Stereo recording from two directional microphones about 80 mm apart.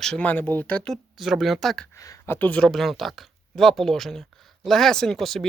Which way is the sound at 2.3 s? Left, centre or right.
Left.